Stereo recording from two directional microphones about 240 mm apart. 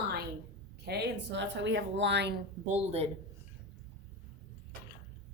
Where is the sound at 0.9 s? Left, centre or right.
Right.